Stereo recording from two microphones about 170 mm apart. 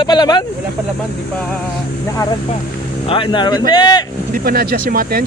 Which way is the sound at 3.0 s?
30° left (ahead or behind).